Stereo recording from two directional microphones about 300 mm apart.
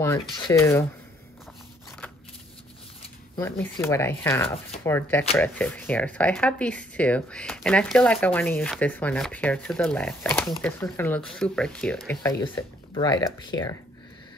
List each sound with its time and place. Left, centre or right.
0.0 s speech: centre
3.3 s speech: centre
13.5 s speech: left